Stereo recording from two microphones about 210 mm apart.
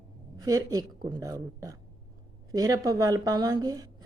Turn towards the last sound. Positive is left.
turn(degrees=-20)  # may be behind; listen again after turning